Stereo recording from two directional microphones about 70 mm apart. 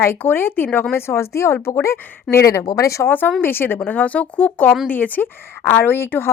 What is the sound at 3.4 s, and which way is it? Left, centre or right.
Speech, left.